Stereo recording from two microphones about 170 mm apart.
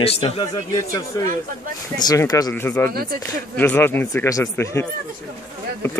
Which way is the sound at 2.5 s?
10° left (ahead or behind).